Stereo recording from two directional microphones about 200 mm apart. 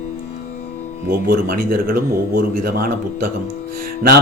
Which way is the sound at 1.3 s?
45° right (ahead or behind).